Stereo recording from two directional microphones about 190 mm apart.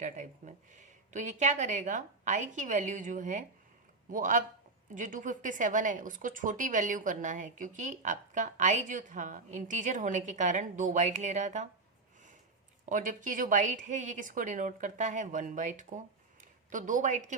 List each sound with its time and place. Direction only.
0.0 s a man's voice: 40° right (ahead or behind)
12.8 s speech: 40° right (ahead or behind)